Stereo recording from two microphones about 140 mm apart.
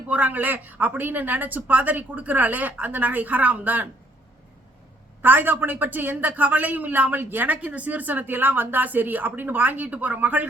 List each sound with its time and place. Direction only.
0.1 s a man's voice: 10° right (ahead or behind)
5.2 s a man's voice: 15° right (ahead or behind)